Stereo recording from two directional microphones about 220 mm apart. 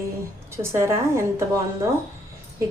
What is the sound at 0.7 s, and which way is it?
Speech, 10° right (ahead or behind).